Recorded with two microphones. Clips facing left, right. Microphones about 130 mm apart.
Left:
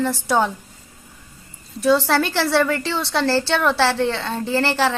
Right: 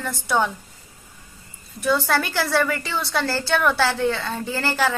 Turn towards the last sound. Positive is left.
turn(degrees=30)  # may be behind; listen again after turning